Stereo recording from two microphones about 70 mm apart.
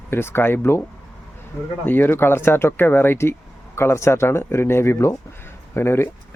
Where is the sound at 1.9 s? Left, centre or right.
Left.